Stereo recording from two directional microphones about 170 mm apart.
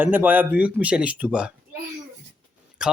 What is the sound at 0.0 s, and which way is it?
Speech, 10° right (ahead or behind).